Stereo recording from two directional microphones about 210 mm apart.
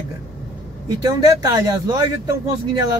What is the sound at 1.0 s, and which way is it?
Speech, 20° right (ahead or behind).